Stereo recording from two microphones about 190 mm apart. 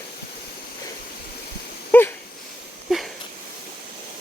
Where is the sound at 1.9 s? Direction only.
10° left (ahead or behind).